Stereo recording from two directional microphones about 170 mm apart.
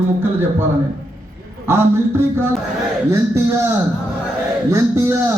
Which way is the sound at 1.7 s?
15° right (ahead or behind).